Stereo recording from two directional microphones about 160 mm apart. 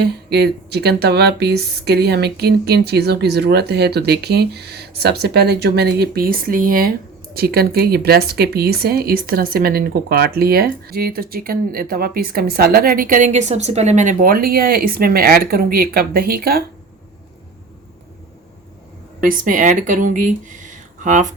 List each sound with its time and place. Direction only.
0.0 s speech: 90° right; by 16.6 s 70° right (ahead or behind)
19.2 s speech: 60° right (ahead or behind)